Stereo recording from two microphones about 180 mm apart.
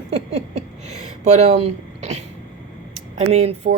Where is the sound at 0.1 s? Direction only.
35° right (ahead or behind).